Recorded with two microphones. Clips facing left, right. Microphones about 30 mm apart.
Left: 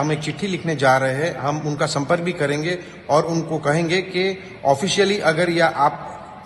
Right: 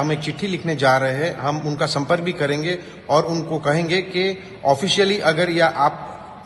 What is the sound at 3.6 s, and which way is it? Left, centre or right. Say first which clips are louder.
A man's voice: even; right.